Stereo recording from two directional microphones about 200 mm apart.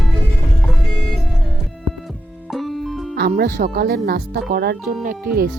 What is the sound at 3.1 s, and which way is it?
Speech, 50° right (ahead or behind).